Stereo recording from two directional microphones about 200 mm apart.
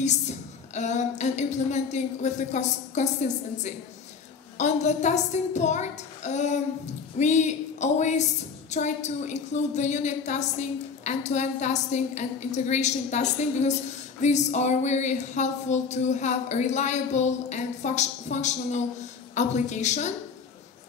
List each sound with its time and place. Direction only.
0.0 s a woman's voice: 35° left (ahead or behind)